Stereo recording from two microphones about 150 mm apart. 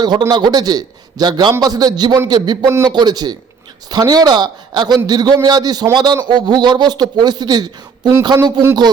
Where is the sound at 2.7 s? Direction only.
20° right (ahead or behind).